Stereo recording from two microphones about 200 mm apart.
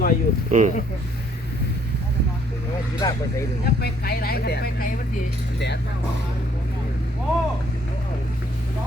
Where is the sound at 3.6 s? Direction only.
50° left (ahead or behind).